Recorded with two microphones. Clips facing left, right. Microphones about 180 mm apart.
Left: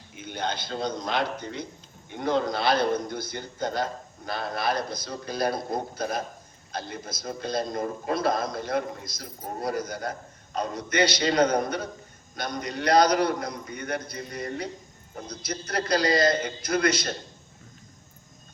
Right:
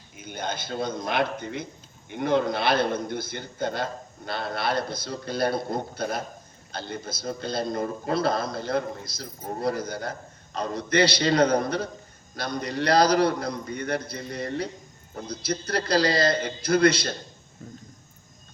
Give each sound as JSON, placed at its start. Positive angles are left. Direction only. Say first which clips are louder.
{"t": 0.3, "sound": "a man's voice", "louder": "left 1 dB", "side_deg": -45}
{"t": 4.6, "sound": "a man's voice", "louder": "right 1 dB", "side_deg": -30}